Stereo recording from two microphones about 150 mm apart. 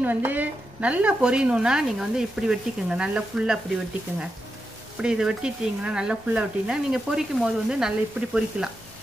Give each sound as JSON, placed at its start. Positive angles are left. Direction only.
{"t": 0.0, "sound": "a woman's voice", "side_deg": -10}
{"t": 5.0, "sound": "speech", "side_deg": -5}